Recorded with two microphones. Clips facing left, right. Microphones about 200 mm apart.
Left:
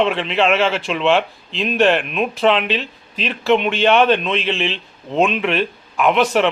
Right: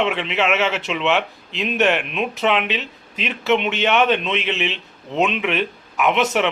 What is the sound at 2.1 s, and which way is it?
Speech, 20° right (ahead or behind).